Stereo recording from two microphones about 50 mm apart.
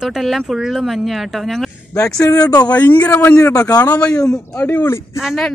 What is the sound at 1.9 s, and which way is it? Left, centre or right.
Speech, left.